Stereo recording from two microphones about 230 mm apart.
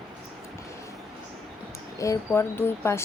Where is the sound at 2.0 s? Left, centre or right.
Centre.